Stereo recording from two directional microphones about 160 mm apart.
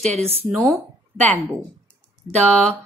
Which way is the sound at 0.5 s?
Centre (ahead or behind).